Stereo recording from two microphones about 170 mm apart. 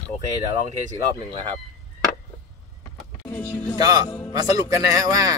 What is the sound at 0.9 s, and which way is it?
Speech, 30° right (ahead or behind).